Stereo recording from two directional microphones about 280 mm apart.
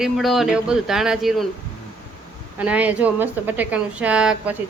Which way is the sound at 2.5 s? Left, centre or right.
Centre.